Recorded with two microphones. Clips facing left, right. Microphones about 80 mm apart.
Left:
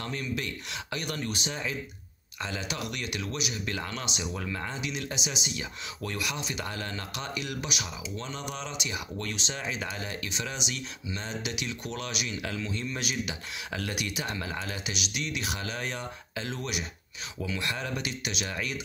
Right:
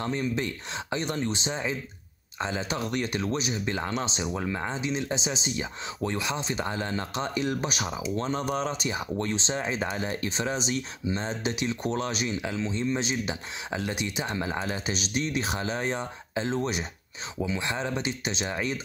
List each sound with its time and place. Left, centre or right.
0.0 s speech: right